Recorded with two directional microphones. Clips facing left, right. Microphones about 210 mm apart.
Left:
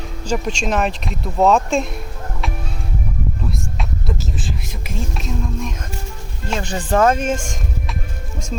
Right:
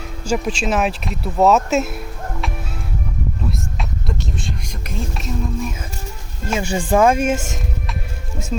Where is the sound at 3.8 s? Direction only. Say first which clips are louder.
Left 1 dB; centre (ahead or behind).